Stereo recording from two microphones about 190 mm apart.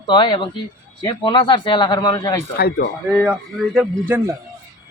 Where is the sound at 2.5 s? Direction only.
55° left (ahead or behind).